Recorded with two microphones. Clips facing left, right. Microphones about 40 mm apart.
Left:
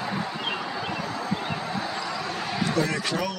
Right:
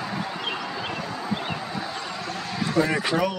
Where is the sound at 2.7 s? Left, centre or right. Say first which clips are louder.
Right 6 dB; centre.